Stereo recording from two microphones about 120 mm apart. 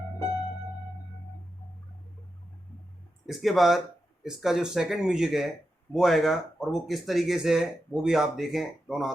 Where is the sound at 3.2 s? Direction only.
Centre (ahead or behind).